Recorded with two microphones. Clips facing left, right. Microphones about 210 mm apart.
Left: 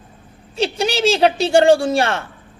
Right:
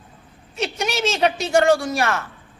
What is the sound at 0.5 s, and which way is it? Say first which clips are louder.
A man's voice: left 5 dB; 30° left (ahead or behind).